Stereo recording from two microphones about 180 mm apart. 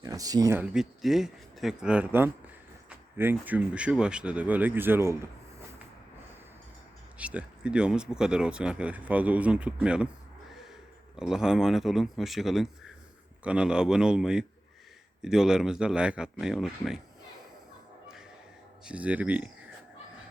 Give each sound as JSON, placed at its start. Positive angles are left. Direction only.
{"t": 0.0, "sound": "speech", "side_deg": -20}
{"t": 0.6, "sound": "speech", "side_deg": -5}
{"t": 7.2, "sound": "speech", "side_deg": -5}
{"t": 11.2, "sound": "speech", "side_deg": -5}
{"t": 18.9, "sound": "speech", "side_deg": -5}